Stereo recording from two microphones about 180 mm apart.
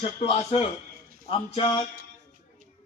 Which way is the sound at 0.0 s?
35° left (ahead or behind).